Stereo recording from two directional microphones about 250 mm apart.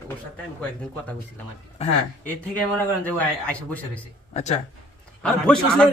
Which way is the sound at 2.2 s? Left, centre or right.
Centre.